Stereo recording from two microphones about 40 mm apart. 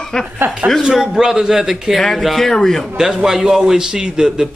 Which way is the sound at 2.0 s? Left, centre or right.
Centre.